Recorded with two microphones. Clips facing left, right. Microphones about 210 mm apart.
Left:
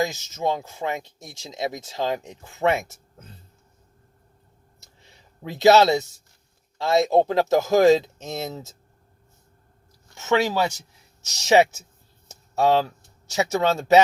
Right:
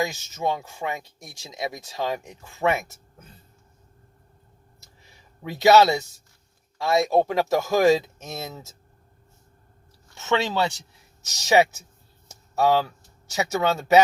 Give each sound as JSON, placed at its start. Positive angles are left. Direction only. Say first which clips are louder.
{"t": 0.0, "sound": "speech", "louder": "left 2 dB", "side_deg": 20}
{"t": 5.4, "sound": "speech", "louder": "left 1 dB", "side_deg": 25}
{"t": 10.2, "sound": "speech", "louder": "left 2 dB", "side_deg": 20}
{"t": 11.2, "sound": "speech", "louder": "left 2 dB", "side_deg": 25}
{"t": 12.3, "sound": "a sound", "louder": "left 1 dB", "side_deg": 25}
{"t": 13.3, "sound": "speech", "louder": "left 2 dB", "side_deg": 25}